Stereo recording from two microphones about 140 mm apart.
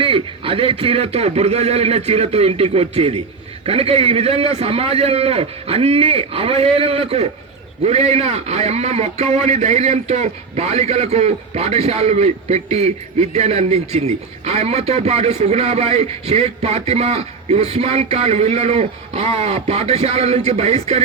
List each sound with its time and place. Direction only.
0.0 s a man's voice: 40° right (ahead or behind)